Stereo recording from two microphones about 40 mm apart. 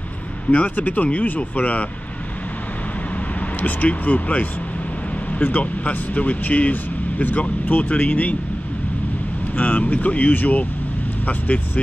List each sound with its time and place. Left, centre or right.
0.5 s speech: left
3.3 s speech: left
5.6 s speech: left
9.6 s speech: left